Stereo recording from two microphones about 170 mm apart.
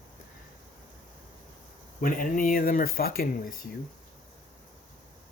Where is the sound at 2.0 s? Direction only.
55° left (ahead or behind).